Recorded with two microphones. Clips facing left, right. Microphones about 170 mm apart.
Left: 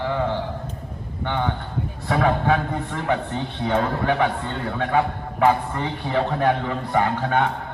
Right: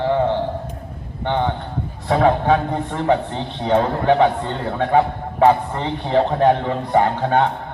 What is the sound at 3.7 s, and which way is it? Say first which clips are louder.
A man's voice: right 6 dB; 25° right (ahead or behind).